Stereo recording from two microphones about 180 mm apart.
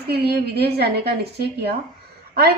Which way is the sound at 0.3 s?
60° right (ahead or behind).